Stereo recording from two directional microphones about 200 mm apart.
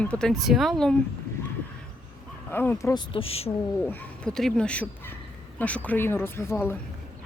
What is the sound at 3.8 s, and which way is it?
A woman's voice, 5° left (ahead or behind).